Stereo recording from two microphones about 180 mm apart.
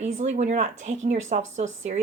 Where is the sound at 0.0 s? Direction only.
40° right (ahead or behind).